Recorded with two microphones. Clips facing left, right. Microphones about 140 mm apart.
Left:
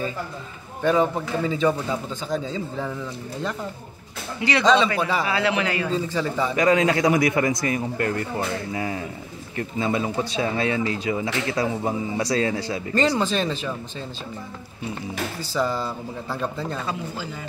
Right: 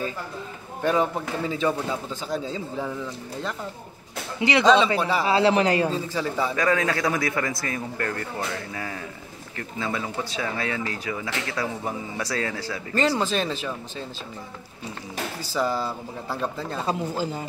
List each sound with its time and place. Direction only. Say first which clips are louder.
0.8 s speech: left 3 dB; 5° right (ahead or behind)
4.4 s speech: right 1 dB; 20° right (ahead or behind)
4.6 s speech: even; 5° right (ahead or behind)
5.2 s a man's voice: right 3 dB; 35° right (ahead or behind)
5.9 s speech: left 2 dB; 5° right (ahead or behind)
6.5 s a man's voice: left 6 dB; 15° left (ahead or behind)
12.9 s speech: left 1 dB; 5° right (ahead or behind)
15.5 s speech: even; 10° right (ahead or behind)
16.8 s a man's voice: right 4 dB; 40° right (ahead or behind)